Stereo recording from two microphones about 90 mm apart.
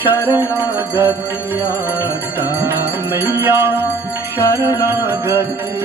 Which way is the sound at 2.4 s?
30° right (ahead or behind).